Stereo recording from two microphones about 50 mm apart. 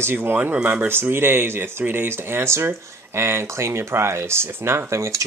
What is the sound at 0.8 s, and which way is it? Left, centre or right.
Speech, right.